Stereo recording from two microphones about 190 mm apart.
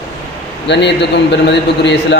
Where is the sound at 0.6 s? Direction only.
65° left (ahead or behind).